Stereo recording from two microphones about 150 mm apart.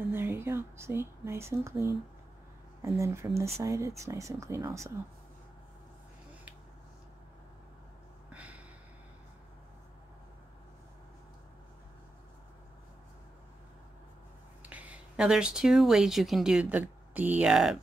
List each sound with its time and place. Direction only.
0.1 s speech: 15° right (ahead or behind)
8.3 s gasp: 10° right (ahead or behind)
14.6 s speech: 10° right (ahead or behind)